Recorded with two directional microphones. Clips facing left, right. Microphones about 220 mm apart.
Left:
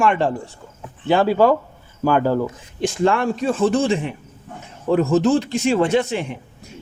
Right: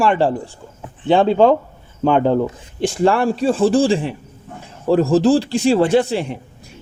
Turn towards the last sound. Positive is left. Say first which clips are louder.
# right 3 dB
turn(degrees=-35)  # may be behind; listen again after turning